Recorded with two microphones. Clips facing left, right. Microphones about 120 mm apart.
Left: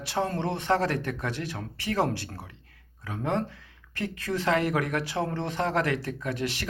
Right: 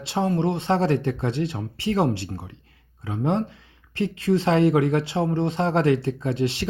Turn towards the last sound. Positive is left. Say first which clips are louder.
# right 7 dB
turn(degrees=-25)  # may be behind; listen again after turning